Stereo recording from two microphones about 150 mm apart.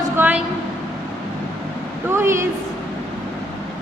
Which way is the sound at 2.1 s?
15° right (ahead or behind).